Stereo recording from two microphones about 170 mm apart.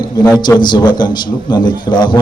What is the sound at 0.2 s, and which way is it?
A man's voice, 25° left (ahead or behind).